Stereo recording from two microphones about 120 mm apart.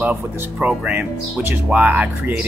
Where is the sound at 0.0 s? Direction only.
15° right (ahead or behind).